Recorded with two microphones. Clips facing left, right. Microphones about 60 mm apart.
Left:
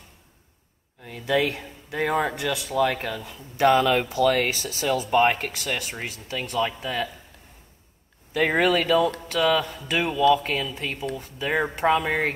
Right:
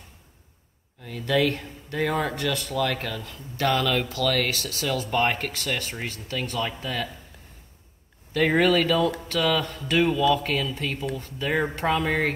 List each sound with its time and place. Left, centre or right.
1.0 s speech: centre
3.5 s speech: centre
8.3 s speech: centre